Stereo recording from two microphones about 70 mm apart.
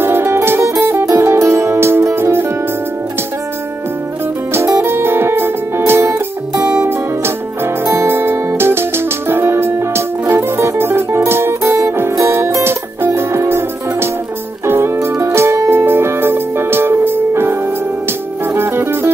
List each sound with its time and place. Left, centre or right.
0.0 s music: right
4.5 s music: right